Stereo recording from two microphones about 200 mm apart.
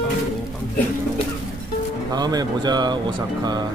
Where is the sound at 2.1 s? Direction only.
20° right (ahead or behind).